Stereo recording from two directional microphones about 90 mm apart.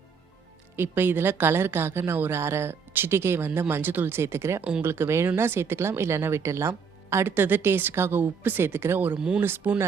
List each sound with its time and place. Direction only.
0.8 s a woman's voice: 25° right (ahead or behind)
9.1 s speech: 10° right (ahead or behind)
9.4 s a woman's voice: 25° right (ahead or behind)